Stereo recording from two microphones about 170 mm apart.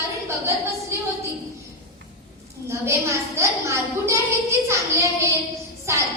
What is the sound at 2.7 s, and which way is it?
A woman's voice, 15° right (ahead or behind).